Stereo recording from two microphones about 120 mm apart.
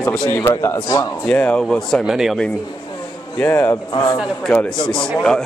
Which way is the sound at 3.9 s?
40° left (ahead or behind).